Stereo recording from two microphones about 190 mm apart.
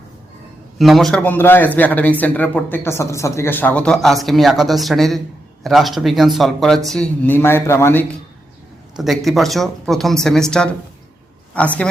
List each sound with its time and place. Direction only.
0.8 s speech: centre (ahead or behind)
9.0 s speech: centre (ahead or behind)